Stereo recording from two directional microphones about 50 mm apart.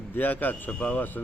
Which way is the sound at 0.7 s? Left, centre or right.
Left.